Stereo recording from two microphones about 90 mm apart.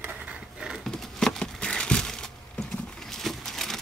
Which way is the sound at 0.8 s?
5° left (ahead or behind).